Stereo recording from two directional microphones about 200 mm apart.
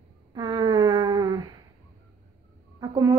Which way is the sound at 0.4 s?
20° right (ahead or behind).